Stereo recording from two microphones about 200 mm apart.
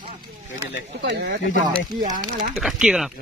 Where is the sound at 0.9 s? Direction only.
55° right (ahead or behind).